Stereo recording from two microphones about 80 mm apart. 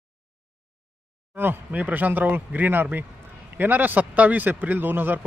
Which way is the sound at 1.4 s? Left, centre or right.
Right.